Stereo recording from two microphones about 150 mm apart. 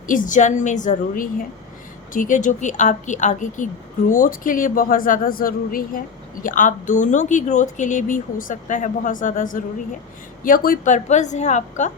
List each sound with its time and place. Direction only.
0.1 s a woman's voice: 60° left (ahead or behind)